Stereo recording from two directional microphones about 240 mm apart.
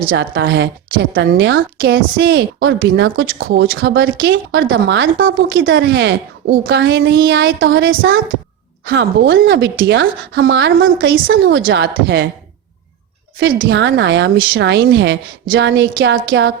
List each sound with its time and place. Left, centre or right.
0.1 s a woman's voice: right
13.7 s a woman's voice: right